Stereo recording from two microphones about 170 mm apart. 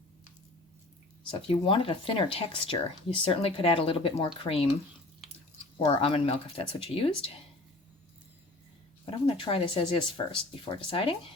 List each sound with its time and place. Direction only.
1.5 s speech: 30° left (ahead or behind)
5.8 s speech: 30° left (ahead or behind)
9.0 s speech: 30° left (ahead or behind)